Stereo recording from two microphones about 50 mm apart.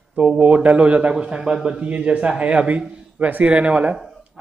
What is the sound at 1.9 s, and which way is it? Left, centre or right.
A man's voice, right.